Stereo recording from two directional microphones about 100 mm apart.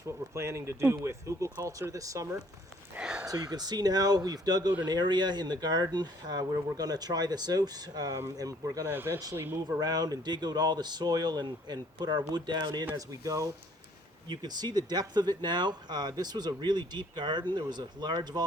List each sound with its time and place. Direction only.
0.3 s speech: 30° right (ahead or behind)
2.9 s a sound: 10° right (ahead or behind)
3.4 s speech: 40° right (ahead or behind)
8.9 s speech: 20° right (ahead or behind)
9.6 s speech: 40° right (ahead or behind)
13.0 s speech: 35° right (ahead or behind)